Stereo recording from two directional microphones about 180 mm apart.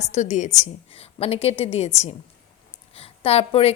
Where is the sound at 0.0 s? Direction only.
40° left (ahead or behind).